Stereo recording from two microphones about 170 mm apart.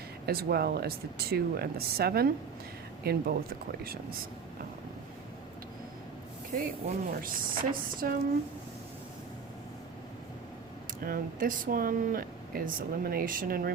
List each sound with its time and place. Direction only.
0.3 s speech: 65° right (ahead or behind)
6.6 s speech: 55° right (ahead or behind)
11.0 s speech: 55° right (ahead or behind)